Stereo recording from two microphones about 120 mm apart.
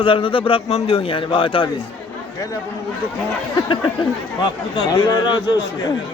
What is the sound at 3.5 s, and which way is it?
A man's voice, 40° left (ahead or behind).